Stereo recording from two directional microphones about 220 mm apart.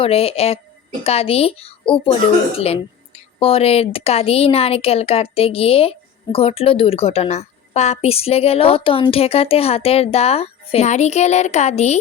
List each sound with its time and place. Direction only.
0.0 s a woman's voice: 25° left (ahead or behind)
3.4 s a woman's voice: 25° left (ahead or behind)